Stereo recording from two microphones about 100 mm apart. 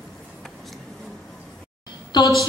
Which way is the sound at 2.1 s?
50° left (ahead or behind).